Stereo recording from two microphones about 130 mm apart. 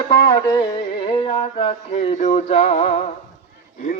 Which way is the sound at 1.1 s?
40° left (ahead or behind).